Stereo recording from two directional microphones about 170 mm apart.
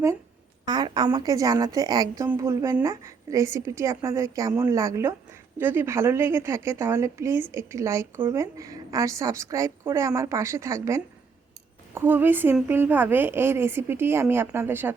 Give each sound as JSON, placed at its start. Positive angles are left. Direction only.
{"t": 0.6, "sound": "a woman's voice", "side_deg": -25}